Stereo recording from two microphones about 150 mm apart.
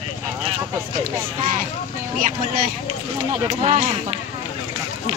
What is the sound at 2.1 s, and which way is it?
Speech, 65° right (ahead or behind).